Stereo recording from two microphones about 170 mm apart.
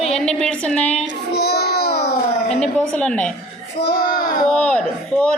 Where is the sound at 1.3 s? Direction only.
70° left (ahead or behind).